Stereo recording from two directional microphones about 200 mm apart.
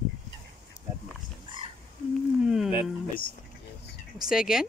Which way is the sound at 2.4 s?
Centre (ahead or behind).